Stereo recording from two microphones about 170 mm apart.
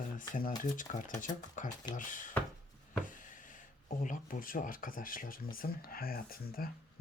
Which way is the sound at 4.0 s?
50° left (ahead or behind).